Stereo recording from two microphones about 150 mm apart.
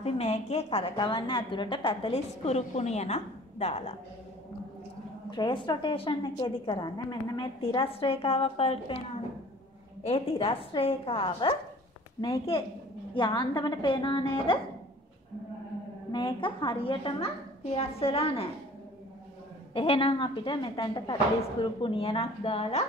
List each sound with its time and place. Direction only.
0.0 s a woman's voice: 45° left (ahead or behind)
5.3 s a woman's voice: 30° left (ahead or behind)
10.0 s a woman's voice: 40° left (ahead or behind)
16.1 s a woman's voice: 30° left (ahead or behind)
19.7 s a woman's voice: 35° left (ahead or behind)